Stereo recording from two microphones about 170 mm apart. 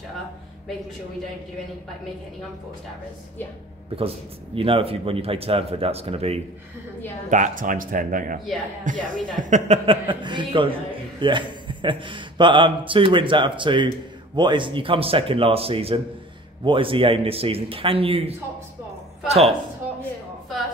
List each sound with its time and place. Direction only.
4.6 s speech: 35° right (ahead or behind)
7.2 s speech: 45° right (ahead or behind)
9.8 s speech: 30° right (ahead or behind)